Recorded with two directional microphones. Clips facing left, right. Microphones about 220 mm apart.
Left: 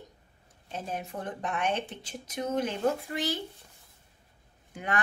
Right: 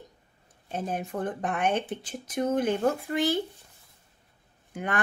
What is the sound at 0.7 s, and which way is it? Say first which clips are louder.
A woman's voice: right 4 dB; 55° right (ahead or behind).